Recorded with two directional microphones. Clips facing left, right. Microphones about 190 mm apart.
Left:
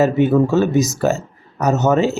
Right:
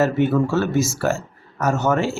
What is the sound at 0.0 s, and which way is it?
Speech, 20° left (ahead or behind).